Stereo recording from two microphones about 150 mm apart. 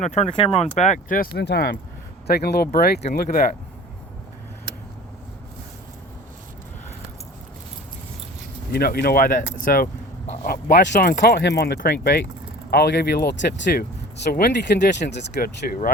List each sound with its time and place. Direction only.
0.0 s speech: 50° left (ahead or behind)
0.3 s speech: 40° left (ahead or behind); by 3.0 s 90° left
3.2 s speech: 60° left (ahead or behind)
8.7 s speech: 90° left; by 10.8 s 75° left (ahead or behind)
11.0 s speech: 90° left
14.3 s speech: 80° left